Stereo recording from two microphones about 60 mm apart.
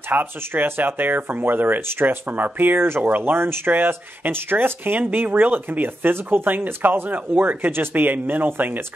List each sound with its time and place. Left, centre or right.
0.1 s speech: right